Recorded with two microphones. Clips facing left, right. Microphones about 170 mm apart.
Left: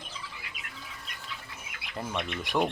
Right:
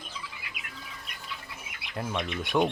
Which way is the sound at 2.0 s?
Centre (ahead or behind).